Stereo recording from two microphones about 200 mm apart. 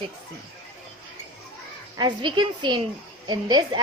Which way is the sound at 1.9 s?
25° right (ahead or behind).